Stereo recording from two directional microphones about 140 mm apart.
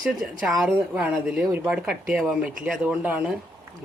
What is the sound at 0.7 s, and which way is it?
Speech, 10° right (ahead or behind).